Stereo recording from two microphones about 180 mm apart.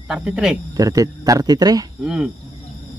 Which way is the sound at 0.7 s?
20° right (ahead or behind).